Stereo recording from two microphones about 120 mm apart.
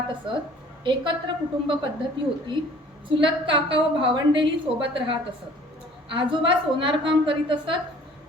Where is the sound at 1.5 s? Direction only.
40° right (ahead or behind).